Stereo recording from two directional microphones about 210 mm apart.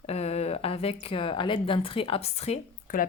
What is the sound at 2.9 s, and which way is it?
Speech, 40° left (ahead or behind).